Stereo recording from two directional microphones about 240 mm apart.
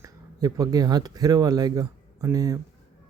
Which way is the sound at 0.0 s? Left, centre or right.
Centre.